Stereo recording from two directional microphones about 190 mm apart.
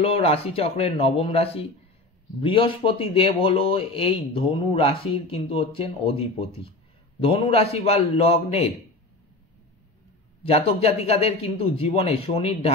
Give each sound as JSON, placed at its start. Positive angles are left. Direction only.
{"t": 0.0, "sound": "a man's voice", "side_deg": 30}
{"t": 10.4, "sound": "a man's voice", "side_deg": 30}